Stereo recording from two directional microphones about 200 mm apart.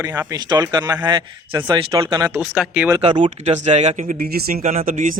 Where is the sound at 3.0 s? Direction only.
25° right (ahead or behind).